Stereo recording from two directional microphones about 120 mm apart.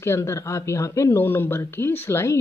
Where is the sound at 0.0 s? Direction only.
20° left (ahead or behind).